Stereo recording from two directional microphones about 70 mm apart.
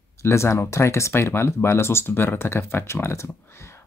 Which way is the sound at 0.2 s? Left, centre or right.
Left.